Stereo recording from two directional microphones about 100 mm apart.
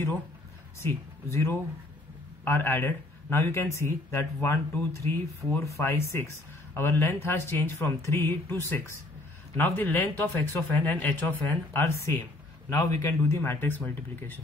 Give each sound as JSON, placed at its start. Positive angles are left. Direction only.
{"t": 0.7, "sound": "a man's voice", "side_deg": 25}
{"t": 13.4, "sound": "speech", "side_deg": 20}